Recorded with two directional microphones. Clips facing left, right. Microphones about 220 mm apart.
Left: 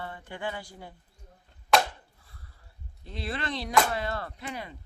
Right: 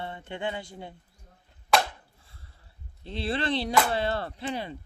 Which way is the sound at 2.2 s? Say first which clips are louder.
Left 1 dB; 25° right (ahead or behind).